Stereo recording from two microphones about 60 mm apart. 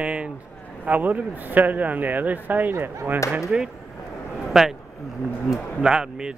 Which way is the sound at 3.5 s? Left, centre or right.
Centre.